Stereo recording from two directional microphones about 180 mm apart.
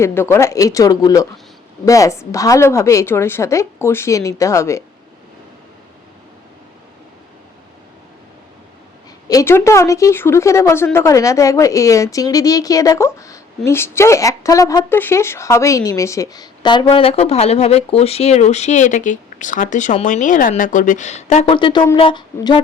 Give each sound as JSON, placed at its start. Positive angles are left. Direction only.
{"t": 0.0, "sound": "speech", "side_deg": 15}
{"t": 9.3, "sound": "speech", "side_deg": 15}
{"t": 21.5, "sound": "speech", "side_deg": 25}